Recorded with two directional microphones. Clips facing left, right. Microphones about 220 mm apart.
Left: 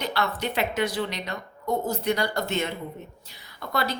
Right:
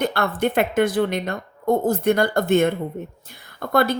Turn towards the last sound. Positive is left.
turn(degrees=-50)  # may be behind; listen again after turning